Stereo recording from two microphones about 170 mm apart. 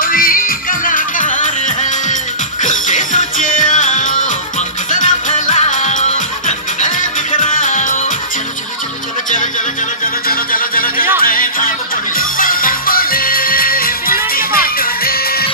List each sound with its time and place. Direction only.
0.0 s music: 55° left (ahead or behind)
10.0 s music: 60° left (ahead or behind)